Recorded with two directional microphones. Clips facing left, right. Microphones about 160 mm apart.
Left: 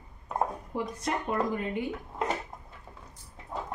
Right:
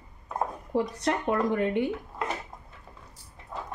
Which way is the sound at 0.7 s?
70° right (ahead or behind).